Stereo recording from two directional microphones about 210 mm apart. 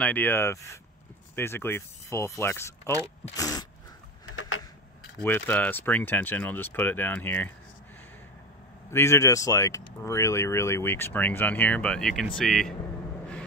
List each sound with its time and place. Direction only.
0.0 s speech: 10° left (ahead or behind)
4.4 s a sound: 80° left
5.2 s speech: 10° left (ahead or behind)
8.9 s speech: 15° left (ahead or behind)